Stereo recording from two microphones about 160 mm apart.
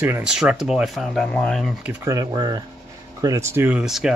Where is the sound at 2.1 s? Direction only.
25° right (ahead or behind).